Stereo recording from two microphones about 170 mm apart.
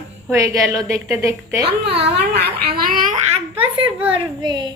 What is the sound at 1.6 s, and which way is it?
A child's voice, 80° right.